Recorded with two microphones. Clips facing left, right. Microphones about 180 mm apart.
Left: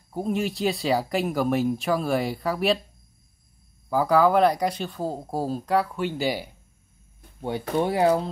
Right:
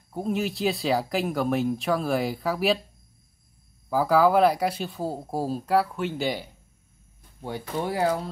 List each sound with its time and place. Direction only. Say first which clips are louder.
0.1 s speech: left 1 dB; centre (ahead or behind)
3.9 s speech: even; centre (ahead or behind)
7.4 s speech: left 5 dB; 25° left (ahead or behind)